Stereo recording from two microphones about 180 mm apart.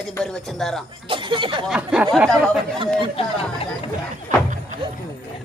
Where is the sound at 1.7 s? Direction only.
5° right (ahead or behind).